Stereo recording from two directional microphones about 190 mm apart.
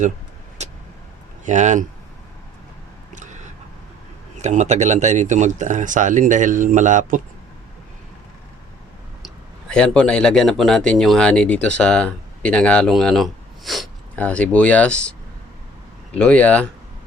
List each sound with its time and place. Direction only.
0.6 s vehicle: 35° right (ahead or behind)
1.5 s speech: 40° right (ahead or behind)
4.4 s speech: 40° right (ahead or behind)
9.2 s speech: 5° left (ahead or behind)
16.1 s speech: 5° left (ahead or behind)